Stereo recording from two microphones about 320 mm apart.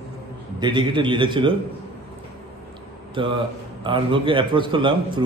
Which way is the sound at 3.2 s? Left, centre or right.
Centre.